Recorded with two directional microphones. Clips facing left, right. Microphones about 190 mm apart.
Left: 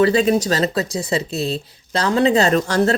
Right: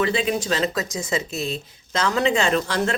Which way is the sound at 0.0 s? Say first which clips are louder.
Left 7 dB; 40° left (ahead or behind).